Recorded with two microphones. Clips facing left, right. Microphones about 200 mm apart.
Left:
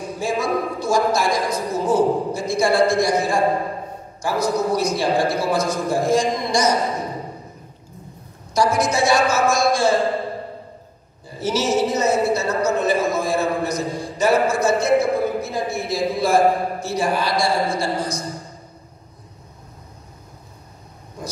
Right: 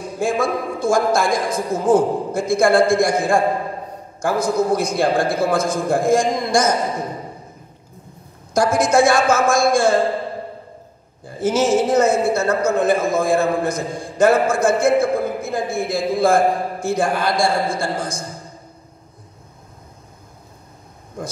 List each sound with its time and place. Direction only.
0.2 s a man's voice: 50° right (ahead or behind)
8.5 s a man's voice: 50° right (ahead or behind)
11.2 s a man's voice: 50° right (ahead or behind)